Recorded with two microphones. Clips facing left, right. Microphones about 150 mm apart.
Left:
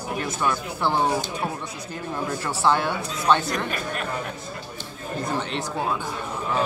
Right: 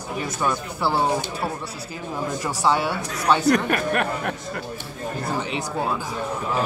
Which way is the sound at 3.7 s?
65° right (ahead or behind).